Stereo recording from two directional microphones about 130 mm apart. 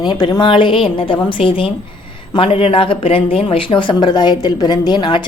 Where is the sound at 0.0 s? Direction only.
35° left (ahead or behind).